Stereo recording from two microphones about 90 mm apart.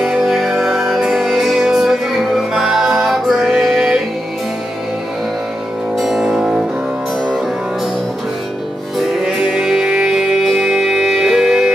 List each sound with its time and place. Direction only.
0.0 s music: 5° right (ahead or behind)
5.9 s music: 5° right (ahead or behind)
8.9 s music: 5° right (ahead or behind)